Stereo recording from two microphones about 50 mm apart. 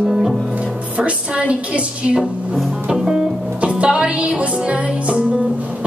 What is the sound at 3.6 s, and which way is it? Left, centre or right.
Music, right.